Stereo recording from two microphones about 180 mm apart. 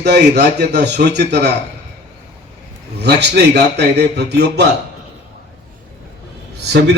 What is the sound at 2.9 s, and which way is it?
A man's voice, 70° right (ahead or behind).